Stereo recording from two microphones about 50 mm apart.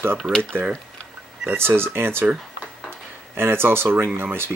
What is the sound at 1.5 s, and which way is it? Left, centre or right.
Speech, right.